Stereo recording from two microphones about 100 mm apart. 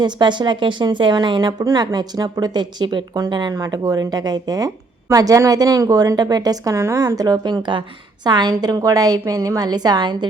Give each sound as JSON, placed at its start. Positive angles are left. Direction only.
{"t": 0.0, "sound": "a woman's voice", "side_deg": -50}
{"t": 7.2, "sound": "a woman's voice", "side_deg": -40}